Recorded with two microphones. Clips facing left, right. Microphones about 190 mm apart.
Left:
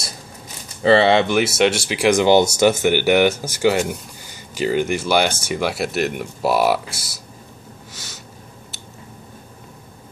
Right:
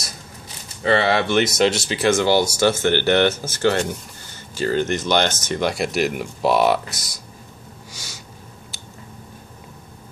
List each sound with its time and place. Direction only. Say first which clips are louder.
0.8 s speech: left 5 dB; 25° left (ahead or behind)
1.2 s speech: left 1 dB; 10° left (ahead or behind)
7.9 s a sound: left 1 dB; centre (ahead or behind)